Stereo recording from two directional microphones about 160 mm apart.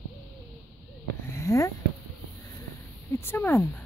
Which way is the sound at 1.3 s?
20° left (ahead or behind).